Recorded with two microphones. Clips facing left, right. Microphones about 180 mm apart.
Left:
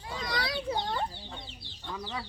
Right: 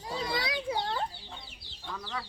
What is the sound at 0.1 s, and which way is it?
Children playing, 30° right (ahead or behind).